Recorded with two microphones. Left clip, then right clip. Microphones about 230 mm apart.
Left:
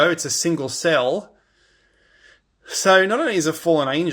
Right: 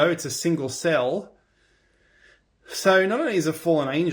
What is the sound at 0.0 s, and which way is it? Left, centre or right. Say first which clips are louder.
Speech: left 4 dB; left.